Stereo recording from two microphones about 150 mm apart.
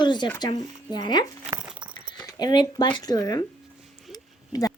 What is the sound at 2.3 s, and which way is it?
Speech, 30° left (ahead or behind).